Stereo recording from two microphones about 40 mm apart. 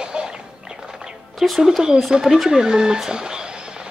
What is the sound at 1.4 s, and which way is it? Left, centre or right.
Speech, centre.